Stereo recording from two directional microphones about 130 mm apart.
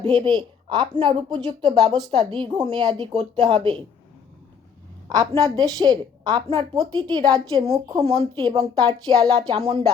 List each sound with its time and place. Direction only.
0.0 s a woman's voice: 35° right (ahead or behind)
3.5 s speech: 45° right (ahead or behind)
5.0 s a woman's voice: 30° right (ahead or behind)